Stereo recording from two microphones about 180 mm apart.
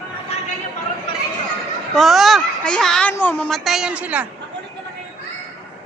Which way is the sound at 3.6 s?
5° right (ahead or behind).